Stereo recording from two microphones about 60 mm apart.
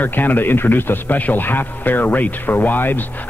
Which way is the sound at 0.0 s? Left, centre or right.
Left.